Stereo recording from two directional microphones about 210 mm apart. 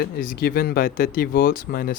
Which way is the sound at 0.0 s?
45° left (ahead or behind).